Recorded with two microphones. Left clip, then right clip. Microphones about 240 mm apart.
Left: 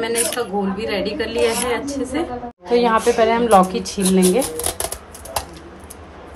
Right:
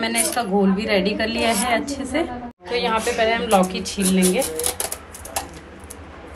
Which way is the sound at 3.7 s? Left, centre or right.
Left.